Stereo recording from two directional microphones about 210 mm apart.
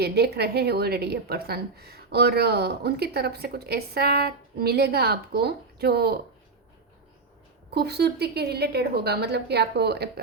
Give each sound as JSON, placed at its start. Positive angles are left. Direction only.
{"t": 0.0, "sound": "a woman's voice", "side_deg": -50}
{"t": 7.7, "sound": "a woman's voice", "side_deg": -50}